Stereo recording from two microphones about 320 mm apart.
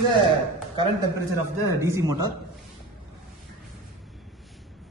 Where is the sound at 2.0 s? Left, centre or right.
Right.